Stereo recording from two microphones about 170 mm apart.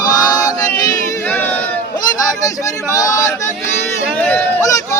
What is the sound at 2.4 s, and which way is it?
Speech, 20° left (ahead or behind).